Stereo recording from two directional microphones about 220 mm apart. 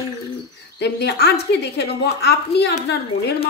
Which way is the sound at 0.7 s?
50° left (ahead or behind).